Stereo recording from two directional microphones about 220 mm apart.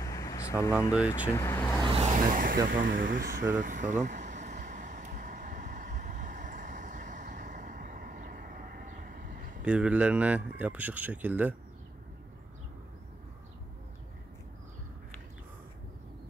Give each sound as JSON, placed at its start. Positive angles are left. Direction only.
{"t": 0.0, "sound": "vehicle", "side_deg": 15}
{"t": 0.9, "sound": "speech", "side_deg": -5}
{"t": 1.3, "sound": "speech", "side_deg": 10}
{"t": 2.1, "sound": "speech", "side_deg": -40}
{"t": 3.5, "sound": "vehicle", "side_deg": -35}
{"t": 9.7, "sound": "speech", "side_deg": -5}